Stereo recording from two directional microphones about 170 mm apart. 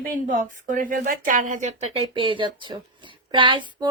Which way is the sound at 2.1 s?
30° right (ahead or behind).